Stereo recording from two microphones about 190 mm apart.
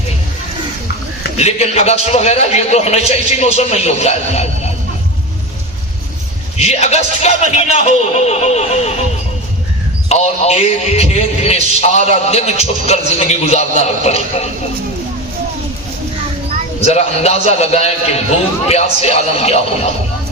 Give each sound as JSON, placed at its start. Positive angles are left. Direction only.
{"t": 1.4, "sound": "a man's voice", "side_deg": 35}
{"t": 6.6, "sound": "a man's voice", "side_deg": 35}
{"t": 10.1, "sound": "a man's voice", "side_deg": 35}
{"t": 16.8, "sound": "a man's voice", "side_deg": 35}